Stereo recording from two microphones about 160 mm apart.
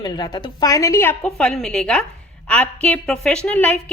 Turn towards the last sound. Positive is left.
turn(degrees=10)  # may be behind; listen again after turning